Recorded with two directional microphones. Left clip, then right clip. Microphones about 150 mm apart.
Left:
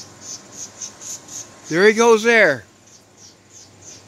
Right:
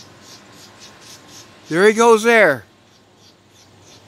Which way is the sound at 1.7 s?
15° right (ahead or behind).